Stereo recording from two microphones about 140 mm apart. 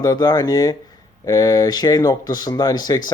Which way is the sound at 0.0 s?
25° left (ahead or behind).